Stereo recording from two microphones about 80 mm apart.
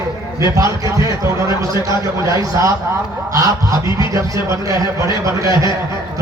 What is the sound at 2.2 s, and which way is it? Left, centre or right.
Speech, right.